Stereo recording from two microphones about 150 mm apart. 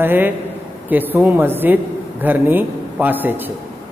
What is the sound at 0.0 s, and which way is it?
A man's voice, 15° right (ahead or behind).